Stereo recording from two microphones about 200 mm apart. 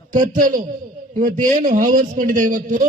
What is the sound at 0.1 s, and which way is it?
Speech, 45° right (ahead or behind).